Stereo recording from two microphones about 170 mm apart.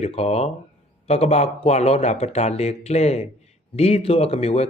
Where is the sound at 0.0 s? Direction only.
40° left (ahead or behind).